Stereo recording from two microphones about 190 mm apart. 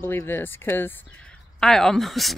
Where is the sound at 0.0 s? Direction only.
10° left (ahead or behind).